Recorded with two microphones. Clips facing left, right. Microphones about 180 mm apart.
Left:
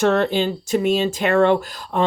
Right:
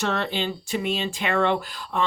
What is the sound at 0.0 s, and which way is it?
Speech, 45° left (ahead or behind).